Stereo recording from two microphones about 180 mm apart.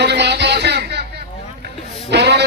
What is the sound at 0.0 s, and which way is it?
Music, 70° right (ahead or behind).